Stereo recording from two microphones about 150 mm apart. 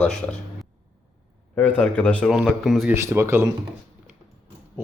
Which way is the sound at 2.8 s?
15° right (ahead or behind).